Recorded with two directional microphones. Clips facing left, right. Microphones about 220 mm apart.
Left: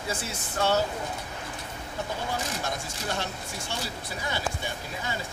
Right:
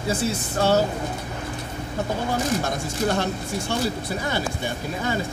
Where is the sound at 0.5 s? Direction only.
40° right (ahead or behind).